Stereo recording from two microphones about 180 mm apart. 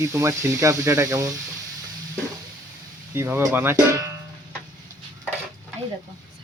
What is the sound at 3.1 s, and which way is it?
Speech, 10° right (ahead or behind).